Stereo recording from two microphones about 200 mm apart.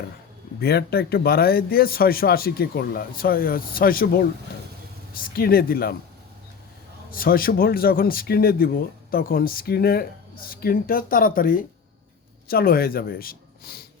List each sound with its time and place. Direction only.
0.6 s speech: 50° left (ahead or behind)
7.1 s speech: 45° left (ahead or behind)